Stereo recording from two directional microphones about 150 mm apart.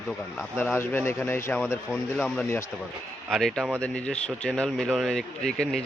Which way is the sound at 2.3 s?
15° left (ahead or behind).